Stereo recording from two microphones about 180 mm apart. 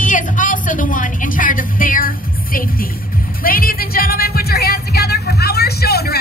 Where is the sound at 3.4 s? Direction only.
55° left (ahead or behind).